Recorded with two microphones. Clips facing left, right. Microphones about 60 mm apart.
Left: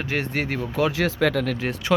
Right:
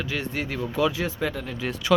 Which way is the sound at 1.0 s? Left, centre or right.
Left.